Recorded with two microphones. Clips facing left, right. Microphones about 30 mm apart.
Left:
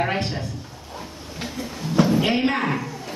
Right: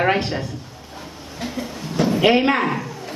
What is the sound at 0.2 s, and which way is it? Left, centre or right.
Speech, centre.